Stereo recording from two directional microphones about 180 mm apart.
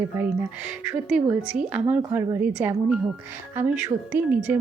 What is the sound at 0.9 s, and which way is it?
A woman's voice, 5° right (ahead or behind).